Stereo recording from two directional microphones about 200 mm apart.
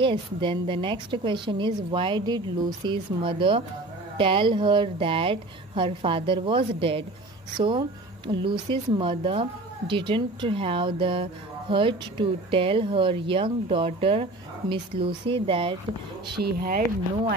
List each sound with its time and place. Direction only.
0.0 s a woman's voice: 25° right (ahead or behind)
16.3 s speech: 50° right (ahead or behind)